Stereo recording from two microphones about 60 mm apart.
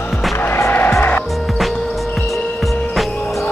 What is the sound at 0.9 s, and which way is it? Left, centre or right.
Music, left.